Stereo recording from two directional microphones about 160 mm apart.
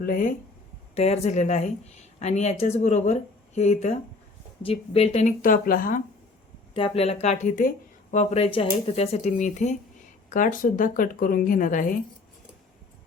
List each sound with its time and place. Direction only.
0.0 s speech: 55° left (ahead or behind)
0.9 s speech: 40° left (ahead or behind); by 6.0 s 60° left (ahead or behind)
6.7 s speech: 35° left (ahead or behind); by 11.9 s 55° left (ahead or behind)